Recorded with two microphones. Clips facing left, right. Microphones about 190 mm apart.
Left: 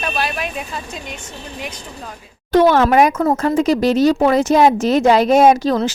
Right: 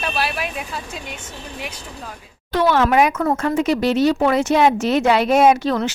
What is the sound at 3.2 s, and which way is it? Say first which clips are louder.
A woman's voice: left 3 dB; 30° left (ahead or behind).